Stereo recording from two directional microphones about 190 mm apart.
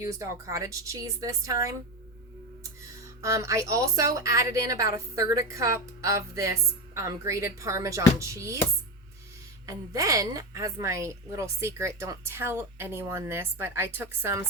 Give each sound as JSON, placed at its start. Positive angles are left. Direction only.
{"t": 0.0, "sound": "a woman's voice", "side_deg": -15}
{"t": 3.2, "sound": "a woman's voice", "side_deg": -15}
{"t": 9.6, "sound": "a woman's voice", "side_deg": -15}